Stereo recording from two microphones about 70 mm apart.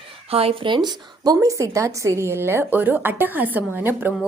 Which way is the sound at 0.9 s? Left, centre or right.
Right.